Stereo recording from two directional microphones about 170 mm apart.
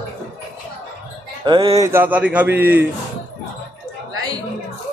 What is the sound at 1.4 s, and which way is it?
Speech, 30° right (ahead or behind).